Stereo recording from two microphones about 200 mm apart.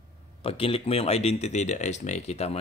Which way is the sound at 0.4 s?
30° left (ahead or behind).